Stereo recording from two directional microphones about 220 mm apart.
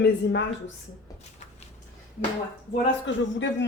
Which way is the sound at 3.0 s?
55° left (ahead or behind).